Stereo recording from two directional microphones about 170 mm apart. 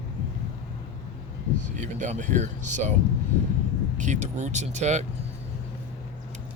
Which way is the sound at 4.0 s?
45° right (ahead or behind).